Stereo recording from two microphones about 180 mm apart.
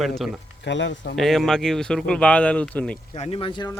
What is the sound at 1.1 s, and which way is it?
Speech, centre (ahead or behind).